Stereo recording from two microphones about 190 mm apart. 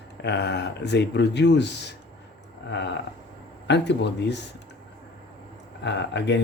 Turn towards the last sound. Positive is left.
turn(degrees=65)  # may be behind; listen again after turning